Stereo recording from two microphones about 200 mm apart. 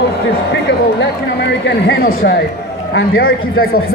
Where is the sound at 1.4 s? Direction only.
60° left (ahead or behind).